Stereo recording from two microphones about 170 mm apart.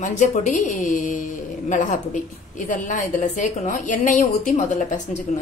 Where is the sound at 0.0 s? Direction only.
45° left (ahead or behind).